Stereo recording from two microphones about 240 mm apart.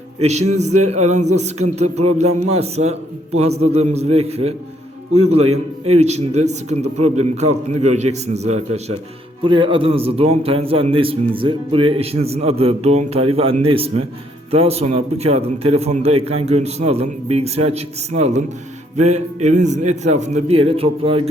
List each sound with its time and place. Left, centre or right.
0.2 s a man's voice: right